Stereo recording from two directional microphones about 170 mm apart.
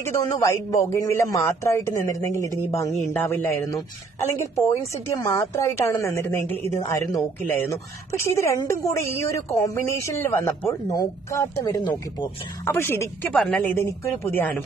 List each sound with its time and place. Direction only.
0.0 s a woman's voice: 15° left (ahead or behind)